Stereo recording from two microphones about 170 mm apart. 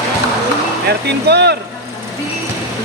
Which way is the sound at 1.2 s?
75° right (ahead or behind).